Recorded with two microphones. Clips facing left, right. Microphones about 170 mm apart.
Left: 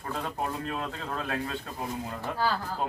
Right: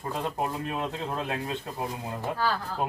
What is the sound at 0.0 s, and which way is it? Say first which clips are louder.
Speech: right 2 dB; 20° right (ahead or behind).